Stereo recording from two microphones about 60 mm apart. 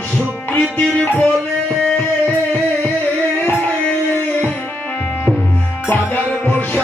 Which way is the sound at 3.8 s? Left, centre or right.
Left.